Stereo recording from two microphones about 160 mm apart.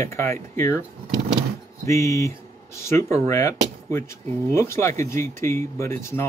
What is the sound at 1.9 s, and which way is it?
Speech, 20° left (ahead or behind).